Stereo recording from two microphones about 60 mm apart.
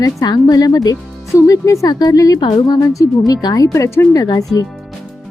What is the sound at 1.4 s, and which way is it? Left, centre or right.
Speech, left.